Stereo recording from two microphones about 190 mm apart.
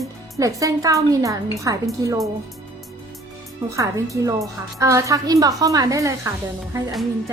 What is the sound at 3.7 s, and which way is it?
A woman's voice, 15° right (ahead or behind).